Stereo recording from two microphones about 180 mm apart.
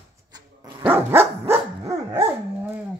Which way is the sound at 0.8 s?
10° right (ahead or behind).